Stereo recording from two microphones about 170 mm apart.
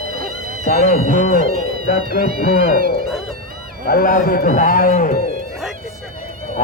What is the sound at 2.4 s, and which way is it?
Speech, 55° left (ahead or behind).